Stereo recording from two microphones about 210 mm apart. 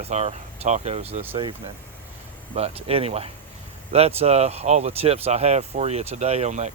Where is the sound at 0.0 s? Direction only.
30° right (ahead or behind).